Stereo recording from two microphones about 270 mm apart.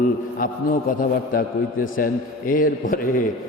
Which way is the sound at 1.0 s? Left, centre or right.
Left.